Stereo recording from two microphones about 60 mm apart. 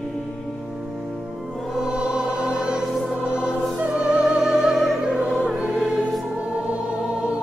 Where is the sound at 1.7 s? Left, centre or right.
Centre.